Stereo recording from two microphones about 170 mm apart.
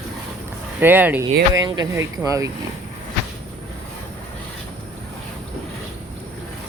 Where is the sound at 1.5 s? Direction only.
20° right (ahead or behind).